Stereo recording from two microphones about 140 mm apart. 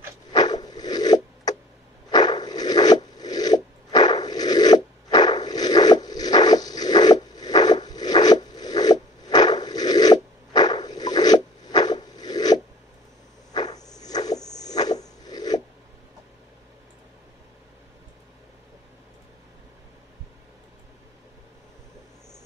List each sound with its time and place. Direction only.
0.3 s zipper: 30° left (ahead or behind)
2.0 s rub: 30° left (ahead or behind)
13.5 s a sound: 30° left (ahead or behind)